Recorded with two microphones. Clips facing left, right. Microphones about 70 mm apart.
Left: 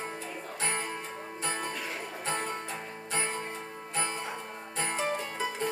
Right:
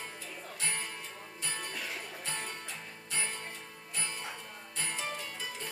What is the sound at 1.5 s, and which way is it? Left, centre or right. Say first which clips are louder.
Music: left 5 dB; left.